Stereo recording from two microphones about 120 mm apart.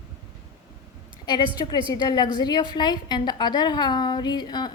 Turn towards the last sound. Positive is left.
turn(degrees=35)  # may be behind; listen again after turning